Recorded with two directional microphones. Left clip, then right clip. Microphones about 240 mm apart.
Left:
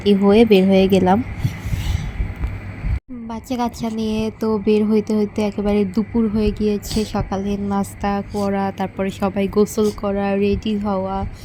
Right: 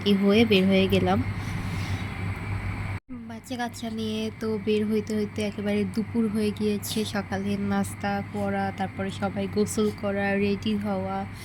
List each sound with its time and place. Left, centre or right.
0.0 s speech: centre
3.2 s a woman's voice: centre